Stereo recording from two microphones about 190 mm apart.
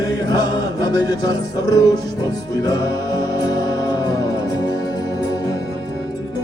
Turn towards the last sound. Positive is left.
turn(degrees=20)  # may be behind; listen again after turning